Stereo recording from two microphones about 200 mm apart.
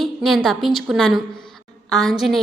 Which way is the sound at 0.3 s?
Centre (ahead or behind).